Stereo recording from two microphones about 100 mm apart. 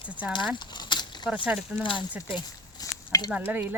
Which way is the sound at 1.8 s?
55° left (ahead or behind).